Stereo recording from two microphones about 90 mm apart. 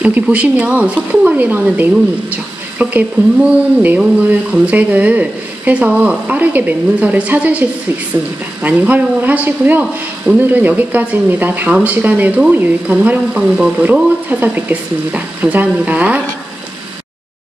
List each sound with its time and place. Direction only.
0.0 s speech: 15° right (ahead or behind)
8.6 s speech: 15° right (ahead or behind)